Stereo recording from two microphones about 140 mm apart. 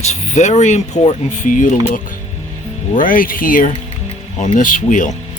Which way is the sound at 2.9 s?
80° left.